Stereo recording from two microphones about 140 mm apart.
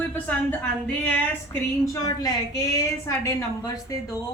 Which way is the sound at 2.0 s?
25° left (ahead or behind).